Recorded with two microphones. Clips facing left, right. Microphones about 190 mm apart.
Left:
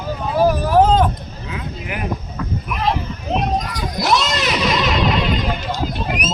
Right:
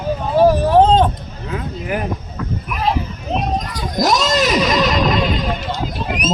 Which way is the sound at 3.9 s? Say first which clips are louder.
Right 4 dB; 40° right (ahead or behind).